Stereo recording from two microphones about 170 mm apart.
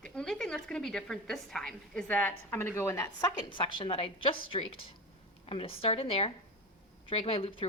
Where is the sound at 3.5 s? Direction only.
30° left (ahead or behind).